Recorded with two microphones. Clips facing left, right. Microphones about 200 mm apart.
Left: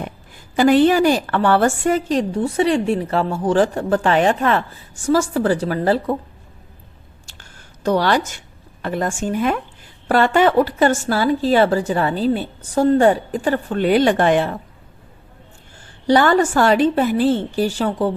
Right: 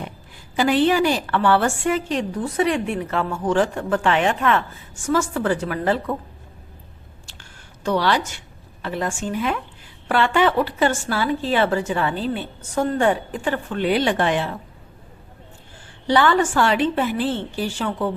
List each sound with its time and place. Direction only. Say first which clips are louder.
0.5 s a woman's voice: left 5 dB; 45° left (ahead or behind)
7.9 s a woman's voice: left 3 dB; 45° left (ahead or behind)
16.0 s a woman's voice: left 3 dB; 40° left (ahead or behind)